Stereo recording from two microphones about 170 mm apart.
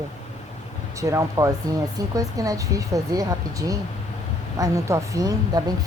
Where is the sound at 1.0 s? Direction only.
20° right (ahead or behind).